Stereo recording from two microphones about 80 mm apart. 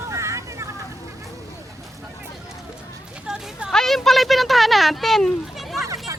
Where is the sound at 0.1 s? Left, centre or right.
Right.